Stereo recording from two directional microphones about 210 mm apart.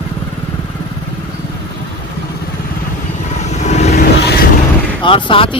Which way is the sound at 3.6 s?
30° left (ahead or behind).